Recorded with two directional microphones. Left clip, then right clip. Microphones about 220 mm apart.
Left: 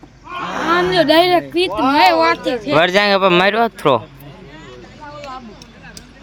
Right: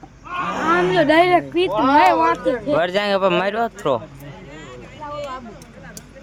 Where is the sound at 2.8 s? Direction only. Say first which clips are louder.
Left 8 dB; 20° left (ahead or behind).